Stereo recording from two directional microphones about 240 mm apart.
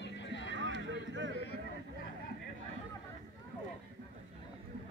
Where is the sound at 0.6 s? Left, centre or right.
Right.